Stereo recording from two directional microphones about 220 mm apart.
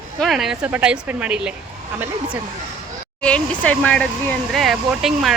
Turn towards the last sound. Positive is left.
turn(degrees=0)  # may be behind; listen again after turning